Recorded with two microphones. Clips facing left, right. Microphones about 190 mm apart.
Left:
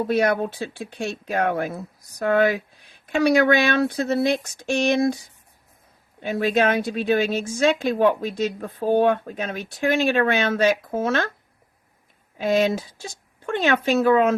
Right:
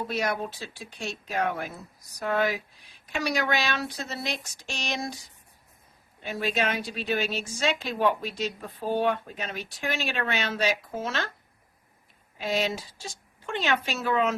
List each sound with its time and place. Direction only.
0.1 s a woman's voice: 55° left (ahead or behind)
12.4 s a woman's voice: 50° left (ahead or behind)